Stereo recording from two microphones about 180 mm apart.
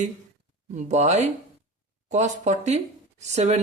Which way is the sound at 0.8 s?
40° right (ahead or behind).